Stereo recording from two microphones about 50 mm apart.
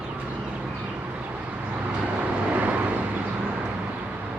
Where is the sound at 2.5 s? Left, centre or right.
Right.